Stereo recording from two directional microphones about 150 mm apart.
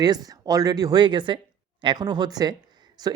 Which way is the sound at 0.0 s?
25° right (ahead or behind).